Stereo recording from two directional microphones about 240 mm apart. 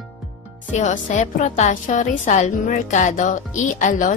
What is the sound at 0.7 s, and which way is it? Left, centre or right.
A woman's voice, left.